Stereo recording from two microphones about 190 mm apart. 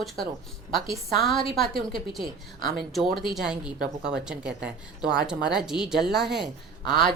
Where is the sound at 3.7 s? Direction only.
55° right (ahead or behind).